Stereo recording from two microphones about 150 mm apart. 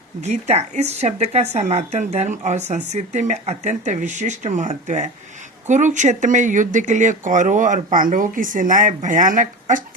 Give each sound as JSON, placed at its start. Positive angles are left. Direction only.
{"t": 0.2, "sound": "speech", "side_deg": -45}